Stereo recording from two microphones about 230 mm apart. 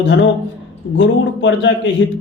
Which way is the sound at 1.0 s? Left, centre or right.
Left.